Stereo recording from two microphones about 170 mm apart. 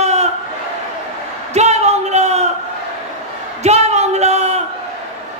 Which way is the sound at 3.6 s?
40° right (ahead or behind).